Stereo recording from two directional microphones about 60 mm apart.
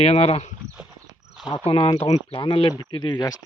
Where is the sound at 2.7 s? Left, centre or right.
Left.